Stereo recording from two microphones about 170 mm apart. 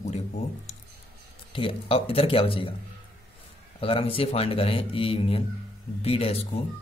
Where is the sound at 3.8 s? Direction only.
35° left (ahead or behind).